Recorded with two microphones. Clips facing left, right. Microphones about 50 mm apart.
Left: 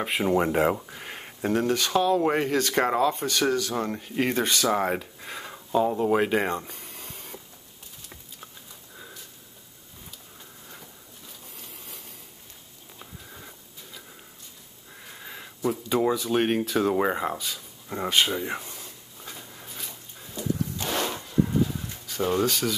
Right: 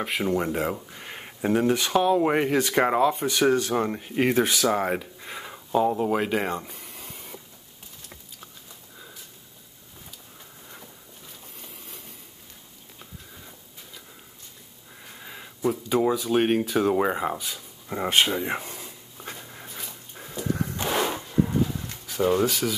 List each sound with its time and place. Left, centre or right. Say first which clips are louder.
0.0 s speech: left 1 dB; centre
0.3 s speech: left 6 dB; left
0.8 s speech: even; centre
3.5 s speech: right 3 dB; right
3.8 s speech: right 3 dB; centre
11.5 s train: right 1 dB; centre
15.0 s sniff: even; centre
15.6 s speech: right 1 dB; centre
18.5 s a sound: right 3 dB; right
19.5 s dog: right 2 dB; centre
20.4 s a sound: right 1 dB; right
20.7 s a sound: right 3 dB; right
21.5 s bird: even; centre
22.0 s speech: right 3 dB; centre